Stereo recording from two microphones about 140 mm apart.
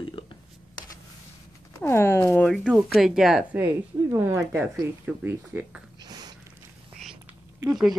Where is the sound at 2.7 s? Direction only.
5° right (ahead or behind).